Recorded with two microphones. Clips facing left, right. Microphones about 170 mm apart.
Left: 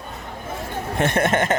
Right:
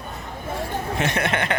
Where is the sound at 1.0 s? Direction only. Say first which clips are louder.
Left 5 dB; 50° left (ahead or behind).